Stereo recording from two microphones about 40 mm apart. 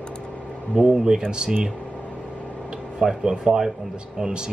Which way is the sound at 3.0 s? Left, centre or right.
Centre.